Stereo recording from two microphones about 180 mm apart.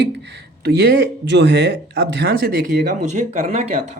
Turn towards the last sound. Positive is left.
turn(degrees=-40)  # may be behind; listen again after turning